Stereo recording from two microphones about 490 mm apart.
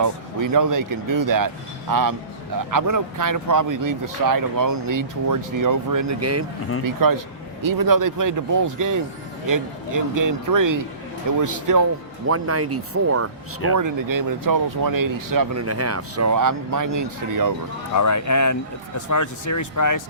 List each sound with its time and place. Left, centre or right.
0.0 s speech: right
6.8 s speech: right
13.7 s speech: right
17.9 s speech: left